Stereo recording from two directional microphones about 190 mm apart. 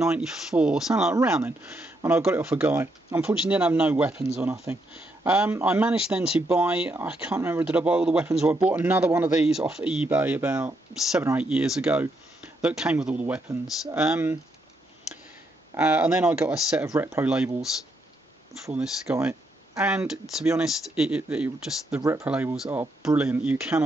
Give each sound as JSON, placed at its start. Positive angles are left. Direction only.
{"t": 0.0, "sound": "speech", "side_deg": -5}
{"t": 15.7, "sound": "speech", "side_deg": -5}
{"t": 18.7, "sound": "speech", "side_deg": -5}
{"t": 19.1, "sound": "a sound", "side_deg": -15}
{"t": 19.8, "sound": "speech", "side_deg": -5}